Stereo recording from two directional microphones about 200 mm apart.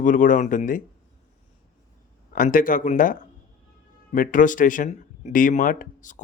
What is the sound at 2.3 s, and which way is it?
Speech, 45° left (ahead or behind).